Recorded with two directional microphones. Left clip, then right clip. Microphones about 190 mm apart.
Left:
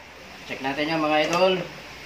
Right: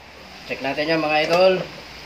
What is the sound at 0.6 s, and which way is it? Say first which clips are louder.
Speech: right 3 dB; 30° right (ahead or behind).